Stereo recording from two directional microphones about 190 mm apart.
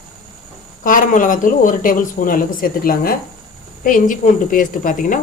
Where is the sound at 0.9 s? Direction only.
45° left (ahead or behind).